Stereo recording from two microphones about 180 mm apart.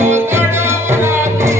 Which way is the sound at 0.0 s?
15° right (ahead or behind).